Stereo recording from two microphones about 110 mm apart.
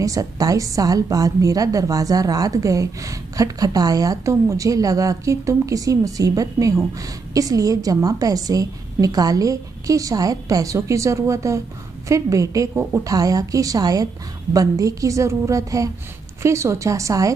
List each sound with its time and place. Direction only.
0.0 s a woman's voice: 30° right (ahead or behind)